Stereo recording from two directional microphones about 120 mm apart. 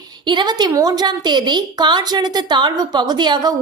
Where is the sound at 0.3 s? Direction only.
40° right (ahead or behind).